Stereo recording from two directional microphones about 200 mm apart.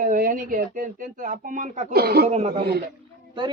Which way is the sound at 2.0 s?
50° right (ahead or behind).